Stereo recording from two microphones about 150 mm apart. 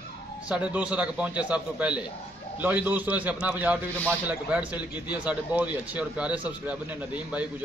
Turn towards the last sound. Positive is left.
turn(degrees=-10)  # may be behind; listen again after turning